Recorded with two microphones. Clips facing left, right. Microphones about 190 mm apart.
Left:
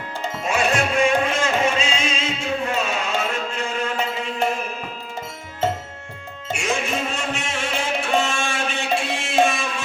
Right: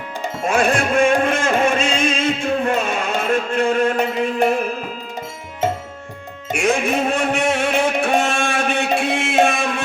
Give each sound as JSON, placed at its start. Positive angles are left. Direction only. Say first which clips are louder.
{"t": 0.4, "sound": "music", "louder": "right 4 dB", "side_deg": -50}
{"t": 6.5, "sound": "music", "louder": "right 6 dB", "side_deg": -55}